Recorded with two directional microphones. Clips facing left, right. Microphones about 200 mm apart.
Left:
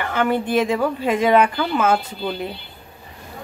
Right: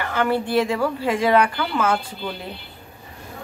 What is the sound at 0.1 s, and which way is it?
A woman's voice, 20° left (ahead or behind).